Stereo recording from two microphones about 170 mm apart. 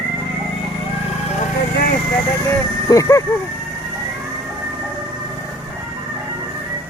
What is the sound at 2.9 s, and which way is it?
Speech, 20° left (ahead or behind).